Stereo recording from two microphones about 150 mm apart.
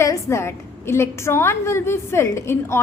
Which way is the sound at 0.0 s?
20° left (ahead or behind).